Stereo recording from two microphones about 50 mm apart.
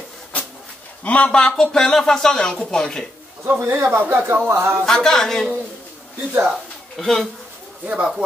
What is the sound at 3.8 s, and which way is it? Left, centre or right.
Speech, right.